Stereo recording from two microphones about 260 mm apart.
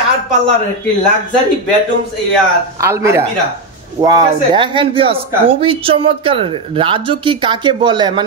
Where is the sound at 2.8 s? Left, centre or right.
Centre.